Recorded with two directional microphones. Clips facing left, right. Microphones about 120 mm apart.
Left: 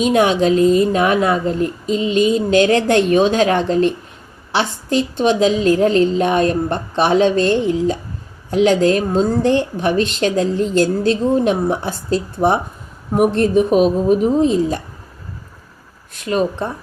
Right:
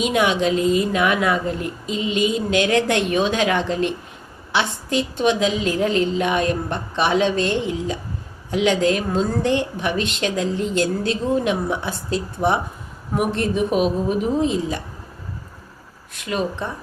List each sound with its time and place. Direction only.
0.0 s a woman's voice: 40° left (ahead or behind)
16.1 s a woman's voice: 40° left (ahead or behind)